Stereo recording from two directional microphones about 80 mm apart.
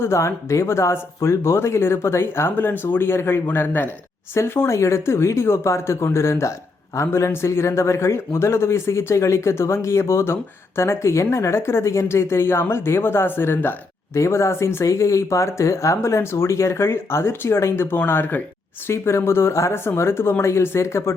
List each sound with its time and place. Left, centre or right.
0.0 s speech: left